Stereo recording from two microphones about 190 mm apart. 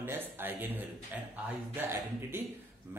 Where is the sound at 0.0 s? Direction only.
10° right (ahead or behind).